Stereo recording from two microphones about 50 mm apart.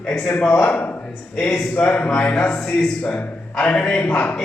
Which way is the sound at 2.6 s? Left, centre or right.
Centre.